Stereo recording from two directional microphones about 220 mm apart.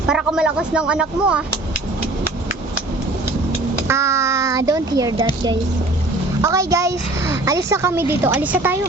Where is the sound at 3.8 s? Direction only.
10° right (ahead or behind).